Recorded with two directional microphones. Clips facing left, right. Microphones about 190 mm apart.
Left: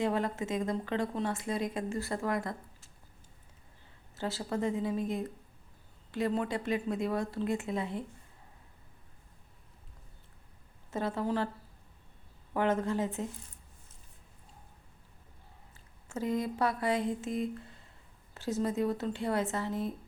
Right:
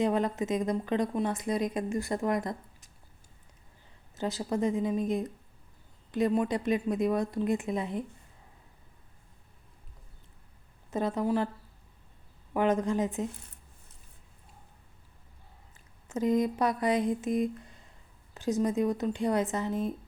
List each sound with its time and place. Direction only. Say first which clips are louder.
0.0 s a woman's voice: right 4 dB; 20° right (ahead or behind)
4.1 s a woman's voice: right 3 dB; 20° right (ahead or behind)
10.9 s a woman's voice: right 4 dB; 15° right (ahead or behind)
12.5 s a woman's voice: right 3 dB; 15° right (ahead or behind)
16.0 s a woman's voice: right 6 dB; 20° right (ahead or behind)